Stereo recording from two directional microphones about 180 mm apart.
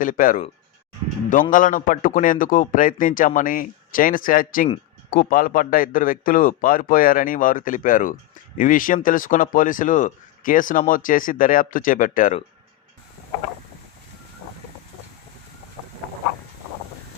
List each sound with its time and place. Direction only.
0.0 s speech: 50° left (ahead or behind)